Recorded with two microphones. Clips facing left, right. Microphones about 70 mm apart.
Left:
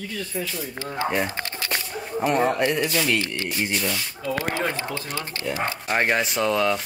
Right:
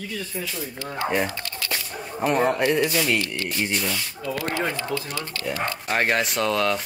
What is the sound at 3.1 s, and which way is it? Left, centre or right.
Speech, left.